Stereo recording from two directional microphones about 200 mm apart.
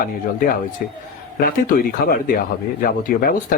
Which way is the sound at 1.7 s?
50° left (ahead or behind).